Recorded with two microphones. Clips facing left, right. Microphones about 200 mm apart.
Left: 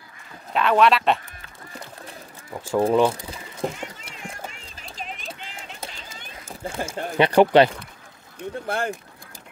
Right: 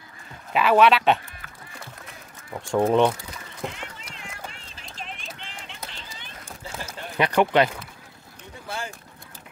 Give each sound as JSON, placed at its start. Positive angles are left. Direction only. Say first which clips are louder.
{"t": 0.5, "sound": "speech", "louder": "right 1 dB", "side_deg": -5}
{"t": 2.5, "sound": "speech", "louder": "left 1 dB", "side_deg": 0}
{"t": 3.3, "sound": "a sound", "louder": "left 5 dB", "side_deg": 35}
{"t": 5.2, "sound": "clip-clop", "louder": "left 3 dB", "side_deg": 40}
{"t": 6.6, "sound": "a sound", "louder": "left 6 dB", "side_deg": 55}
{"t": 7.2, "sound": "speech", "louder": "left 5 dB", "side_deg": 30}
{"t": 8.6, "sound": "speech", "louder": "left 7 dB", "side_deg": 60}